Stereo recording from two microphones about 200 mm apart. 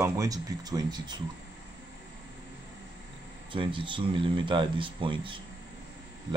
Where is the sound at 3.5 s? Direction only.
25° right (ahead or behind).